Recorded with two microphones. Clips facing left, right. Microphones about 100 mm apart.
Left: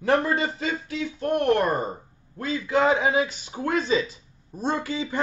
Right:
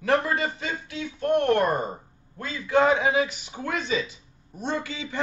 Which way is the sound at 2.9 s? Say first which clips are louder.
Even; 30° left (ahead or behind).